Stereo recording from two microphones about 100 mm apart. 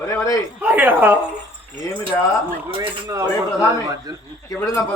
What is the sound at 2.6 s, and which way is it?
Speech, 65° right (ahead or behind).